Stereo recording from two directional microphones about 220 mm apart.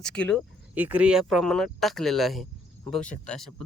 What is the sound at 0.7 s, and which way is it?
Speech, 5° right (ahead or behind).